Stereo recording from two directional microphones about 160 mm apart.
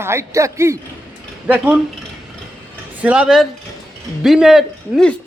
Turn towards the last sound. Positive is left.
turn(degrees=0)  # may be behind; listen again after turning